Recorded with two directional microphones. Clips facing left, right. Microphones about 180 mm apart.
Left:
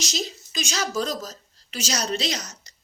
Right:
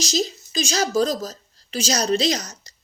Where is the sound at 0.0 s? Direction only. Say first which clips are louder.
Right 7 dB; 35° right (ahead or behind).